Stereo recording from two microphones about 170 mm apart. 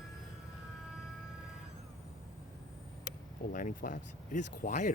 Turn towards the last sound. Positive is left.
turn(degrees=50)  # may be behind; listen again after turning